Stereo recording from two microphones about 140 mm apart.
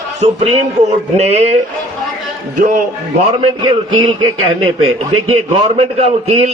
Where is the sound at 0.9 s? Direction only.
50° right (ahead or behind).